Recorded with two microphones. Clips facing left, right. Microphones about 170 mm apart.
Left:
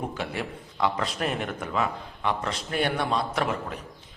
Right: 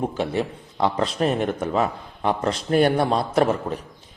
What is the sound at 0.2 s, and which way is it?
A man's voice, 30° right (ahead or behind).